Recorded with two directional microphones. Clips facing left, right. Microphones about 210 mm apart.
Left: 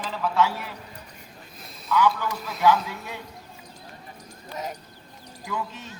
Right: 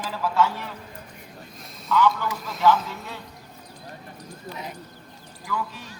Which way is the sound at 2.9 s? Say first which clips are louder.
Even; 15° left (ahead or behind).